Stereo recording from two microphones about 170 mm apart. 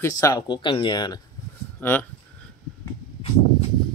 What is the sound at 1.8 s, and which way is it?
Speech, 10° left (ahead or behind).